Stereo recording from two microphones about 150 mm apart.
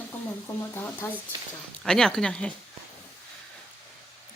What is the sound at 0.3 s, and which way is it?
Speech, 15° left (ahead or behind).